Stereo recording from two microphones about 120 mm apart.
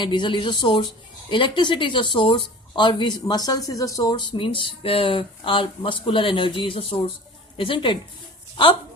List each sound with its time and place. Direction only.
0.0 s a woman's voice: 40° left (ahead or behind)